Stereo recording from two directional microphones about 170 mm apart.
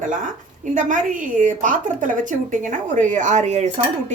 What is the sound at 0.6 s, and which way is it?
A woman's voice, 50° right (ahead or behind).